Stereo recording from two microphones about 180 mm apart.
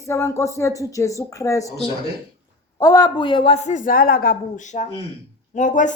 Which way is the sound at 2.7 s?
20° left (ahead or behind).